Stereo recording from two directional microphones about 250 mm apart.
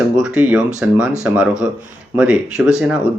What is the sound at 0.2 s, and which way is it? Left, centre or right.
Speech, centre.